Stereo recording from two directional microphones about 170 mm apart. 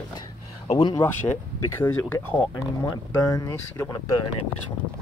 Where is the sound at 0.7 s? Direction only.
25° left (ahead or behind).